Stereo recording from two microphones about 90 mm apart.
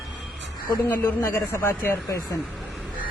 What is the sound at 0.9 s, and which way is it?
A man's voice, 30° left (ahead or behind).